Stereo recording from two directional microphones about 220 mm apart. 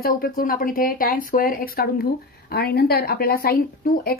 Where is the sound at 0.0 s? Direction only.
40° left (ahead or behind).